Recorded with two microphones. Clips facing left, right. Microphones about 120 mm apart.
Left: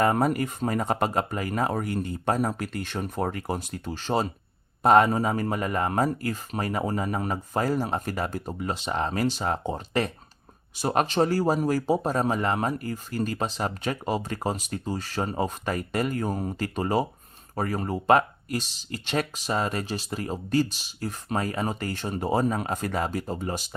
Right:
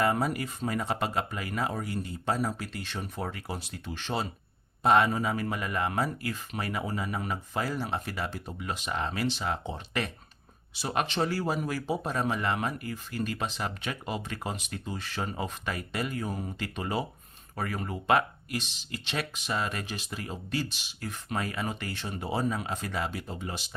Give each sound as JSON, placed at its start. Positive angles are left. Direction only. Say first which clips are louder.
{"t": 0.0, "sound": "speech", "louder": "left 5 dB", "side_deg": 45}